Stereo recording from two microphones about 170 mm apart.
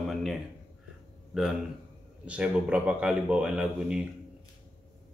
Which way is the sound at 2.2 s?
5° right (ahead or behind).